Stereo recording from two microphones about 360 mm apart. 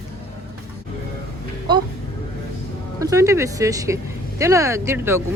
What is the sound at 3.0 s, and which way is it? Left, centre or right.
Speech, centre.